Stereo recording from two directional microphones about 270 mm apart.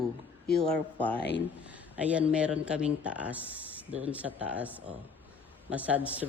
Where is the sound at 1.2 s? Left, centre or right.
Left.